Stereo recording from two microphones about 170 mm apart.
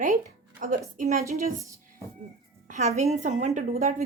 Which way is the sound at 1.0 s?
45° right (ahead or behind).